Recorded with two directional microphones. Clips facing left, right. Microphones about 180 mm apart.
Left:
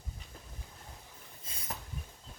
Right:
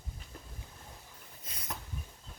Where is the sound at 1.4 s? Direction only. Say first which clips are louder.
Right 1 dB; 25° left (ahead or behind).